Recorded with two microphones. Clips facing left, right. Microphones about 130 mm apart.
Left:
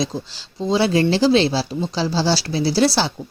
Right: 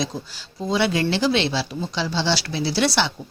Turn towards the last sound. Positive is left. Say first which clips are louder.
# left 4 dB
turn(degrees=35)  # may be behind; listen again after turning